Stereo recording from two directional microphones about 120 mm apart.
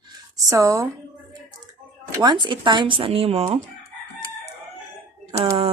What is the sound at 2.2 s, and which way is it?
Speech, 40° right (ahead or behind).